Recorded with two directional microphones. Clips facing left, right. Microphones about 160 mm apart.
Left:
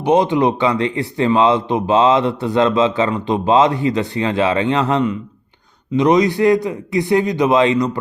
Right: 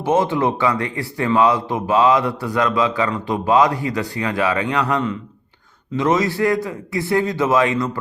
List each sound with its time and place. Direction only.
0.0 s a man's voice: 20° left (ahead or behind)